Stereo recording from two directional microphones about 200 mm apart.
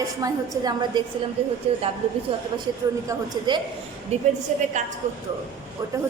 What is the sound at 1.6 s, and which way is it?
Speech, 30° right (ahead or behind).